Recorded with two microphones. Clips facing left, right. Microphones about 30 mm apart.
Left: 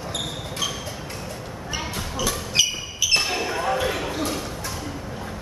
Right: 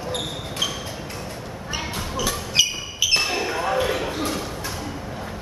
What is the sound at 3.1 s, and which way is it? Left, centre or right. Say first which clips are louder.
Basketball bounce: even; centre.